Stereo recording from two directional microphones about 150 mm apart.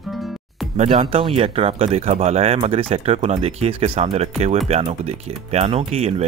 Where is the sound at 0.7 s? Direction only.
40° right (ahead or behind).